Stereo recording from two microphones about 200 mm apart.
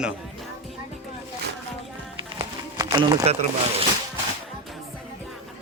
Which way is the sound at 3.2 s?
30° right (ahead or behind).